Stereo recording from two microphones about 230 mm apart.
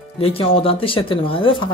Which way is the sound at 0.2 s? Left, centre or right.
Left.